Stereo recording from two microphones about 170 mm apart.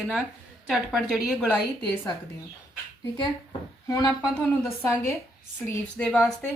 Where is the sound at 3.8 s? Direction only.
20° left (ahead or behind); by 6.5 s 5° left (ahead or behind).